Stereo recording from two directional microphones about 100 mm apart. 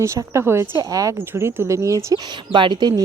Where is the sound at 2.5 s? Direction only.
50° right (ahead or behind).